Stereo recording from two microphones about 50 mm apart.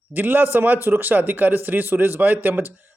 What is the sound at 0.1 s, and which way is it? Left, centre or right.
Speech, right.